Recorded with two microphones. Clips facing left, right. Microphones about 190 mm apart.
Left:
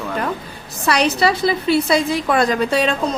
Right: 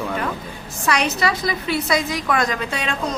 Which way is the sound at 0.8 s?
35° left (ahead or behind).